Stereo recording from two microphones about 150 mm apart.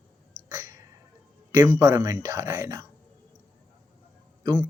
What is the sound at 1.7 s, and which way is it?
Speech, 20° right (ahead or behind).